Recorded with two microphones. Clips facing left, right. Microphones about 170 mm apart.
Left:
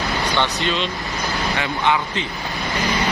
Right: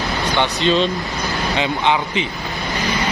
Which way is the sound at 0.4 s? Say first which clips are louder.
Right 8 dB; 20° right (ahead or behind).